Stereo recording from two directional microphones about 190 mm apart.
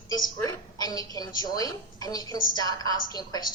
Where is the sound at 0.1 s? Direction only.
20° left (ahead or behind).